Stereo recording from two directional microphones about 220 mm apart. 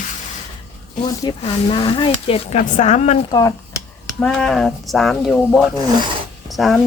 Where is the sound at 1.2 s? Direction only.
20° left (ahead or behind).